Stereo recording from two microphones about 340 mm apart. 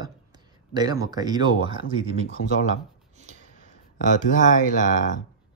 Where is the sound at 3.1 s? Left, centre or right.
Right.